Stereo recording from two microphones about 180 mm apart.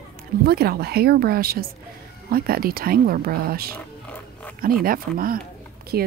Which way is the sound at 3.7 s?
10° left (ahead or behind).